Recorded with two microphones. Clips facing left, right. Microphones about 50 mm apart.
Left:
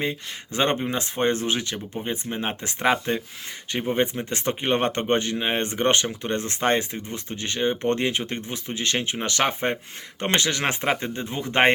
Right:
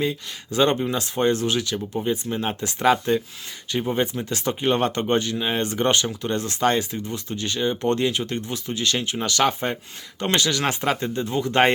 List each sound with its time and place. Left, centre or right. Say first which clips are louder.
0.0 s speech: right 2 dB; left